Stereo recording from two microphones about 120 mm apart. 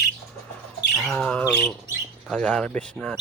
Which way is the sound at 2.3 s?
10° left (ahead or behind).